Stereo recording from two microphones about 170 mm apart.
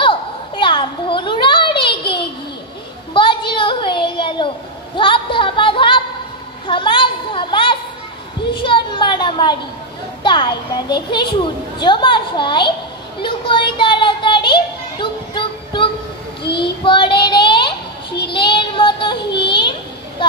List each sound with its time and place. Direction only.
0.0 s a sound: 30° left (ahead or behind)
3.1 s child singing: 30° left (ahead or behind)
4.9 s speech: 30° left (ahead or behind)
6.7 s a sound: 30° left (ahead or behind)
10.2 s a child's voice: 30° left (ahead or behind)
13.2 s children playing: 30° left (ahead or behind)
16.5 s child singing: 30° left (ahead or behind)